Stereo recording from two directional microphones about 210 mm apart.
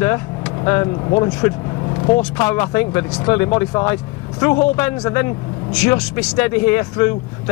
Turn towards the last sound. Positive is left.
turn(degrees=15)  # may be behind; listen again after turning